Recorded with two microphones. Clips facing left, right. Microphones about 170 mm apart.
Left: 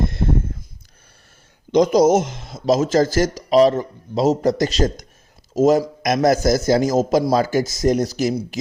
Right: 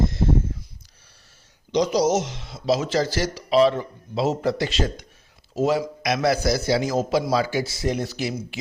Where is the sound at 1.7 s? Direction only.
50° left (ahead or behind).